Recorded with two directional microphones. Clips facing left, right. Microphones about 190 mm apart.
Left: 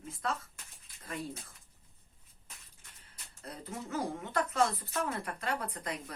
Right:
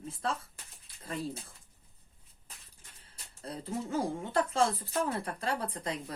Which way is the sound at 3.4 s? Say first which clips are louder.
Right 6 dB; 30° right (ahead or behind).